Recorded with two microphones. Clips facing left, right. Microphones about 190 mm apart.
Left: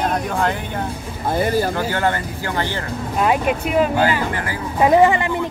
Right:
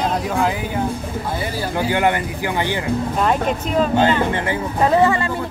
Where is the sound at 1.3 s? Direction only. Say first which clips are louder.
Left 9 dB; 50° left (ahead or behind).